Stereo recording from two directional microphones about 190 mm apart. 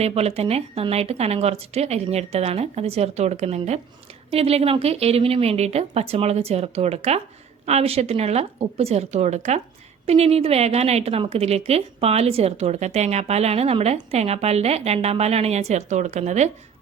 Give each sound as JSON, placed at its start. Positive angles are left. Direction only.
{"t": 0.0, "sound": "a woman's voice", "side_deg": -35}